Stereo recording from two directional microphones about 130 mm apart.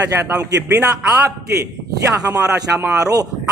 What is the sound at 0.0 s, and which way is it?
Speech, 15° right (ahead or behind).